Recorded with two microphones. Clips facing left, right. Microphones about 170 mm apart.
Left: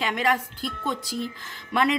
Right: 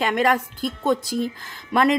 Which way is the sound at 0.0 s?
50° right (ahead or behind).